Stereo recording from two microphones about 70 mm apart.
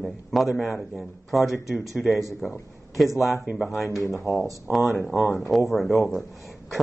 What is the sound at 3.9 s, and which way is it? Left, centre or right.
Speech, left.